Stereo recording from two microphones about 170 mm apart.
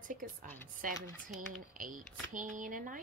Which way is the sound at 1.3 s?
50° right (ahead or behind).